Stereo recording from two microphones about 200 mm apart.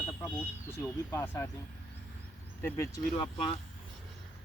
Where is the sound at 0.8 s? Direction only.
15° left (ahead or behind).